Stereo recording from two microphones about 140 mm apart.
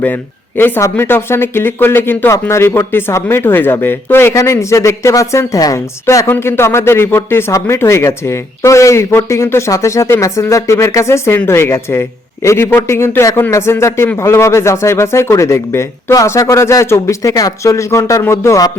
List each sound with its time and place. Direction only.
0.0 s speech: 15° left (ahead or behind)